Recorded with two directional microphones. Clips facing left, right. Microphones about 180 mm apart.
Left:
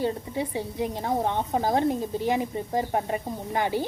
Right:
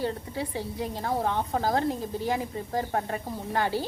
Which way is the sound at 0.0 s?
20° left (ahead or behind).